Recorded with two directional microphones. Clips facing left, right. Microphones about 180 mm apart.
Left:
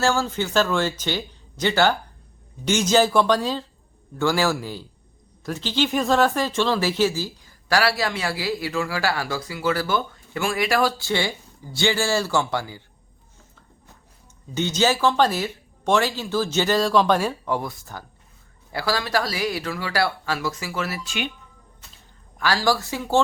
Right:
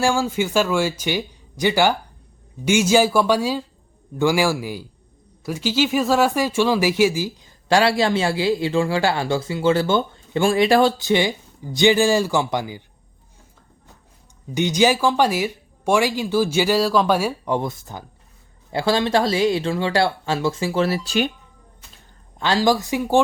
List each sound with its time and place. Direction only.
0.0 s speech: 10° right (ahead or behind)
14.5 s speech: 15° right (ahead or behind)
17.5 s speech: 20° right (ahead or behind); by 21.3 s 35° right (ahead or behind)
22.4 s speech: 20° right (ahead or behind)